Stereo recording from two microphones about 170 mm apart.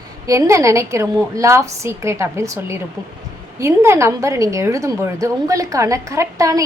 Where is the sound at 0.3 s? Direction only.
15° right (ahead or behind).